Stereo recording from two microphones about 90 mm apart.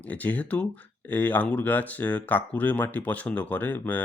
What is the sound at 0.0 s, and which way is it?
Speech, 15° left (ahead or behind).